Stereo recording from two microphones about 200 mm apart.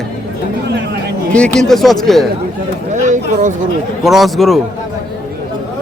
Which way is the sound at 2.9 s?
40° right (ahead or behind).